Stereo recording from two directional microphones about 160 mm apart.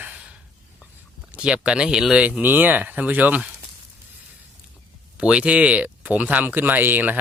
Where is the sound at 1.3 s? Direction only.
5° right (ahead or behind).